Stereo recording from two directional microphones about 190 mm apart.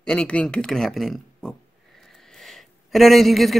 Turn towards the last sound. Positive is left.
turn(degrees=0)  # may be behind; listen again after turning